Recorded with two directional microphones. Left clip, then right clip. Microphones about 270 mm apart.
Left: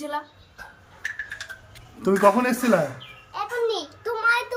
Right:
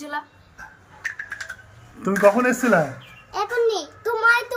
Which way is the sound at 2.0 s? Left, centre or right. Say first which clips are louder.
Right 2 dB; centre.